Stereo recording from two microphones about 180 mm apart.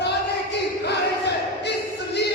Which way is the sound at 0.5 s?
70° left (ahead or behind).